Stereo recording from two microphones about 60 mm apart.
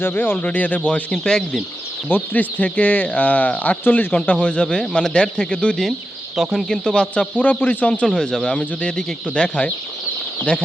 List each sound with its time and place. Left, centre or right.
0.0 s speech: left
1.1 s speech: centre
2.0 s speech: left
6.3 s speech: centre; by 8.0 s left
8.0 s speech: centre